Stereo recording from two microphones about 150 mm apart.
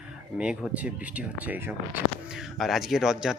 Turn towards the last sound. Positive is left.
turn(degrees=-5)  # may be behind; listen again after turning